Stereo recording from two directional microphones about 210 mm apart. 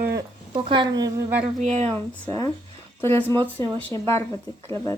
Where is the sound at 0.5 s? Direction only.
25° right (ahead or behind).